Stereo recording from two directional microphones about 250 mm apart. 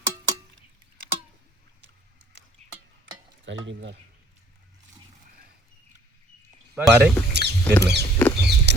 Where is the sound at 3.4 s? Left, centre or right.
Right.